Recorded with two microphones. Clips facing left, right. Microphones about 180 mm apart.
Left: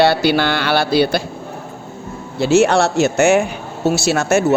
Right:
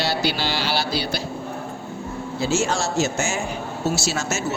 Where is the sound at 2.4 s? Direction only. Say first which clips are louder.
Left 10 dB; 65° left (ahead or behind).